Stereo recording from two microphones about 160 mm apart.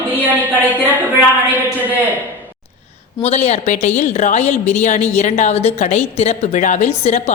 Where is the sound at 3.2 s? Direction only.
45° left (ahead or behind).